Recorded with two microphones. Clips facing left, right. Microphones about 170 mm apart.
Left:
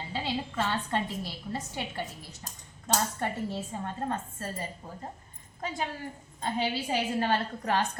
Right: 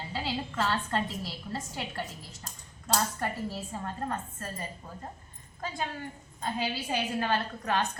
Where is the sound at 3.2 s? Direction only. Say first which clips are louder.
Left 1 dB; 20° left (ahead or behind).